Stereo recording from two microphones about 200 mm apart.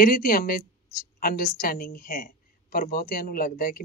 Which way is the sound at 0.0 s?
45° left (ahead or behind).